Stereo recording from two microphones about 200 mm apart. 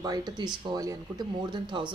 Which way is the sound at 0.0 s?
20° right (ahead or behind).